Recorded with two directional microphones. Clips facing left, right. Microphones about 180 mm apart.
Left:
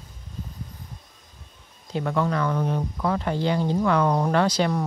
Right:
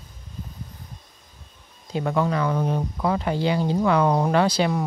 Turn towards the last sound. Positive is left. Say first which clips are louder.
# right 1 dB
turn(degrees=-10)  # may be behind; listen again after turning